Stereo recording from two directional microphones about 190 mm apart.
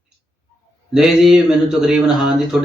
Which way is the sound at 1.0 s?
5° right (ahead or behind).